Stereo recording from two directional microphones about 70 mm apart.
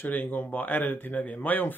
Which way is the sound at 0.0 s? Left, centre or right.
Left.